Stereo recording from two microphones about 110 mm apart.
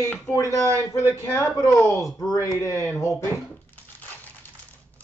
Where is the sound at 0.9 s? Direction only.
25° left (ahead or behind).